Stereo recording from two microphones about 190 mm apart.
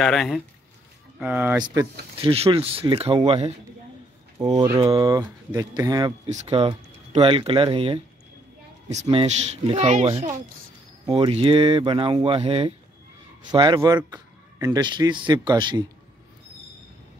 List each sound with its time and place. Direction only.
0.0 s speech: centre (ahead or behind)
1.2 s speech: 10° right (ahead or behind)
2.1 s speech: 30° right (ahead or behind)
6.2 s speech: 35° right (ahead or behind)
9.0 s speech: 25° right (ahead or behind)